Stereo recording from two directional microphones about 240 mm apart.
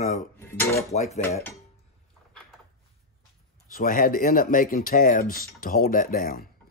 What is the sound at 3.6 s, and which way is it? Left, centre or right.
Speech, left.